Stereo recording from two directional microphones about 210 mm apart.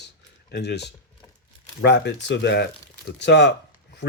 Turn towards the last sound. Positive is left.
turn(degrees=55)  # may be behind; listen again after turning